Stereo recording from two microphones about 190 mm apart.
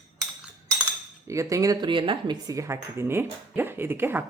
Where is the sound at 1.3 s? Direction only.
15° right (ahead or behind).